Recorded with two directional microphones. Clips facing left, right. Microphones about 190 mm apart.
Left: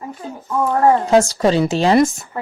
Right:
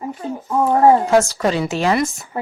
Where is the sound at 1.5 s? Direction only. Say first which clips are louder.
Left 5 dB; 35° left (ahead or behind).